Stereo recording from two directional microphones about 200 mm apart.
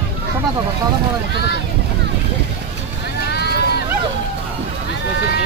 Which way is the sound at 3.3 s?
55° left (ahead or behind).